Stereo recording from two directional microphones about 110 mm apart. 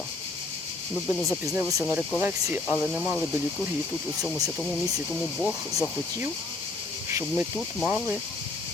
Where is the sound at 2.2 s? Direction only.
20° right (ahead or behind).